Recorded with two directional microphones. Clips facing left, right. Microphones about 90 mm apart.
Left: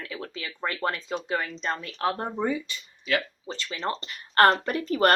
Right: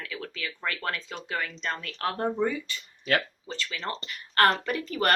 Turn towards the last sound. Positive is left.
turn(degrees=30)  # may be behind; listen again after turning